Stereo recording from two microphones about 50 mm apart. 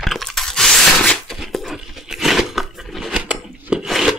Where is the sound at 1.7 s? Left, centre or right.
Centre.